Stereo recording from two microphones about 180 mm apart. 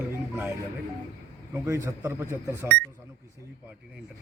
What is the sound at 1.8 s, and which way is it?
Speech, 15° right (ahead or behind).